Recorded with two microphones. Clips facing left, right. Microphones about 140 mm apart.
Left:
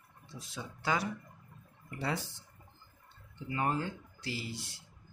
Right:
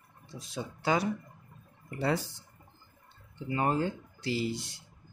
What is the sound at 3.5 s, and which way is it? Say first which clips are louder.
Speech: right 4 dB; 25° right (ahead or behind).